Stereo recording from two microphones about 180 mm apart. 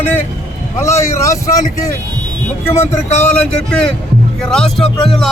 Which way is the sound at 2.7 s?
15° left (ahead or behind).